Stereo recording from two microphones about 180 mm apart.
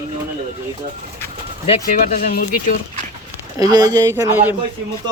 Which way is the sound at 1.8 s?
50° left (ahead or behind).